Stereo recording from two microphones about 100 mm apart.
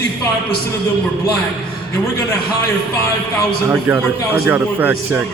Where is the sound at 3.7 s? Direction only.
20° right (ahead or behind).